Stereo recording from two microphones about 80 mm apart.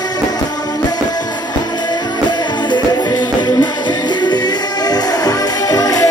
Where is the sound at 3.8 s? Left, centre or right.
Left.